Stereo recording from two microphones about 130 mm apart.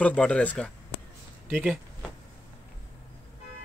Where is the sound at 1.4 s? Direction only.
15° right (ahead or behind).